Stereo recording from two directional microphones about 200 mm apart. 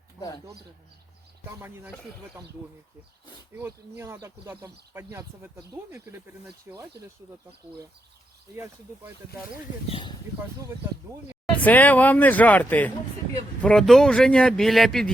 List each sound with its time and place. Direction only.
0.2 s speech: 15° left (ahead or behind)
1.5 s speech: 10° right (ahead or behind)
3.6 s speech: 15° right (ahead or behind)
8.5 s speech: 10° right (ahead or behind)
9.9 s speech: 25° left (ahead or behind)
11.5 s speech: 10° left (ahead or behind)